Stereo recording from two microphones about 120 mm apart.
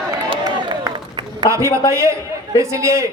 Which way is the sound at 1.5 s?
25° right (ahead or behind).